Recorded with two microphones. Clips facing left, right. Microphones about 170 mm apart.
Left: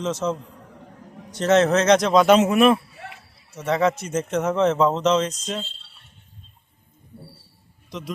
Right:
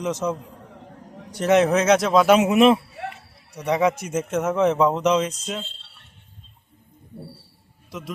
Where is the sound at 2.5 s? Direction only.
20° right (ahead or behind).